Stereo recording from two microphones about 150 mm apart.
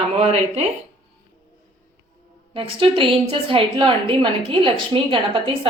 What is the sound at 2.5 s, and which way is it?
A woman's voice, 35° right (ahead or behind).